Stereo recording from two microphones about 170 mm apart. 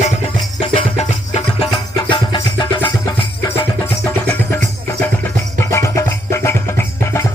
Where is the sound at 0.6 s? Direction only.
35° left (ahead or behind).